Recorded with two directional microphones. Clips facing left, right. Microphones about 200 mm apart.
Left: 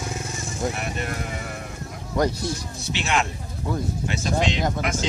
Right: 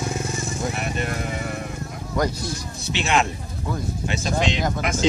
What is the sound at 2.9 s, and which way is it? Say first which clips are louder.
Speech: right 3 dB; 20° right (ahead or behind).